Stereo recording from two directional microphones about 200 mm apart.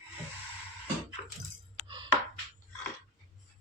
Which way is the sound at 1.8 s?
25° right (ahead or behind).